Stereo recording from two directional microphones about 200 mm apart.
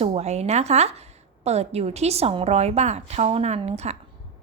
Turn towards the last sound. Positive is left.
turn(degrees=-30)  # may be behind; listen again after turning